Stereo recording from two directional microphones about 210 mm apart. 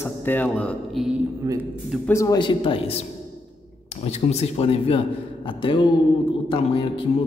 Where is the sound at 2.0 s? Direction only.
15° left (ahead or behind).